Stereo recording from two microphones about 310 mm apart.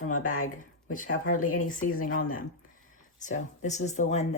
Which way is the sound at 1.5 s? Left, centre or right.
Left.